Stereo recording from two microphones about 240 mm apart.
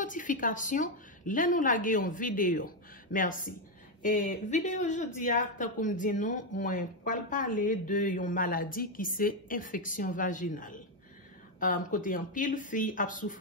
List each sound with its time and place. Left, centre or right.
0.0 s speech: left